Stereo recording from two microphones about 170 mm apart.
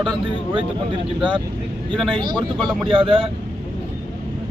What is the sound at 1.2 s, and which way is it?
Speech, 30° right (ahead or behind).